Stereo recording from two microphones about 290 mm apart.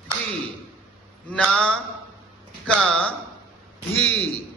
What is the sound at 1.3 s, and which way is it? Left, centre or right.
A man's voice, centre.